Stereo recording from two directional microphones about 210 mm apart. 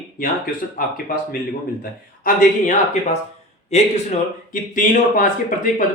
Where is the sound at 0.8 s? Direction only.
40° left (ahead or behind).